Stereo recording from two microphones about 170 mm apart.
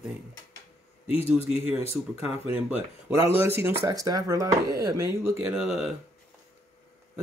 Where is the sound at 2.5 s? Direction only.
10° right (ahead or behind).